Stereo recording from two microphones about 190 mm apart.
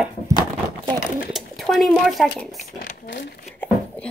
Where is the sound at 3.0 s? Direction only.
65° left (ahead or behind).